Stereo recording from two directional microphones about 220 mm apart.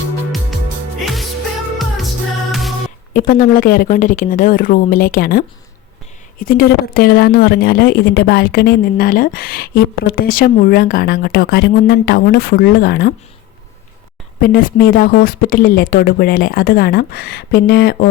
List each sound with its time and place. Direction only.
2.5 s music: centre (ahead or behind)
3.1 s a woman's voice: 40° left (ahead or behind)
14.4 s speech: 40° left (ahead or behind)